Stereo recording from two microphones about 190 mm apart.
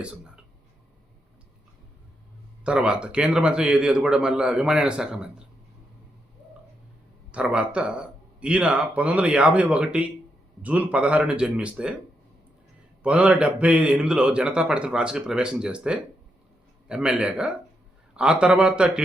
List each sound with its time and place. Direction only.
2.6 s a man's voice: 5° right (ahead or behind)
7.3 s a man's voice: 5° right (ahead or behind)
13.0 s a man's voice: 5° right (ahead or behind)